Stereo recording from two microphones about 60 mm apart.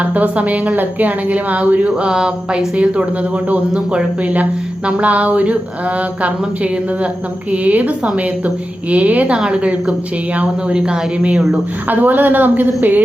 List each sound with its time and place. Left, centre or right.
0.0 s speech: right
11.9 s a woman's voice: right